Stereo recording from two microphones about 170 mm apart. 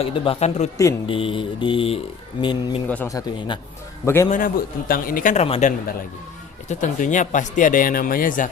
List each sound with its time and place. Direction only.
0.0 s mantra: 35° left (ahead or behind)
2.4 s speech: 30° left (ahead or behind)
2.9 s a man's voice: 15° left (ahead or behind)
4.3 s speech: 55° left (ahead or behind)